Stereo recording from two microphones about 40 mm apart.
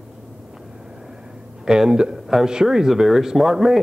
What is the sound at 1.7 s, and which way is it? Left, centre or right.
Speech, centre.